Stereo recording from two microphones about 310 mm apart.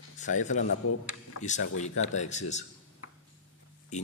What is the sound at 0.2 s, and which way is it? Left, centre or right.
Speech, left.